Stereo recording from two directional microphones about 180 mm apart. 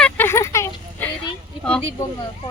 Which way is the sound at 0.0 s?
10° left (ahead or behind).